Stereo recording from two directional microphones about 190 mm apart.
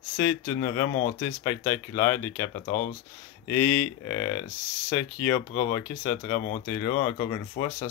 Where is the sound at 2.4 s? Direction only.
45° left (ahead or behind).